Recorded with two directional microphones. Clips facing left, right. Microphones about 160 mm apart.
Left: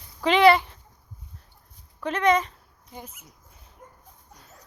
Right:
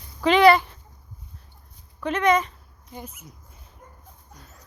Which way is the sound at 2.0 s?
35° left (ahead or behind).